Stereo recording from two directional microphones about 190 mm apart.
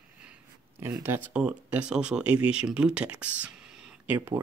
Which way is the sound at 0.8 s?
10° right (ahead or behind).